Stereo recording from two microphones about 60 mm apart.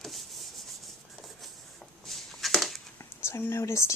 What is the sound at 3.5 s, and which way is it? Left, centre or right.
Speech, left.